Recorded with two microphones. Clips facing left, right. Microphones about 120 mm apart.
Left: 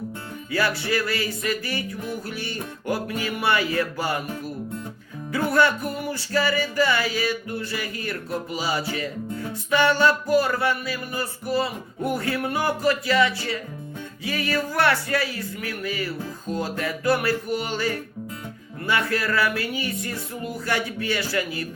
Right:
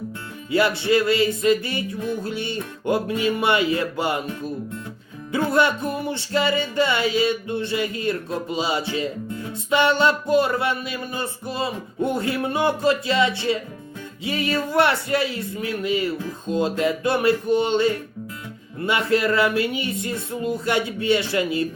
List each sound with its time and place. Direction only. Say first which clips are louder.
0.5 s music: right 5 dB; 25° right (ahead or behind)